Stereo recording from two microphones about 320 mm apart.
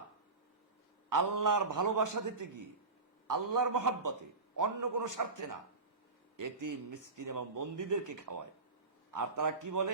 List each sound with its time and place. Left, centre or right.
1.1 s a man's voice: right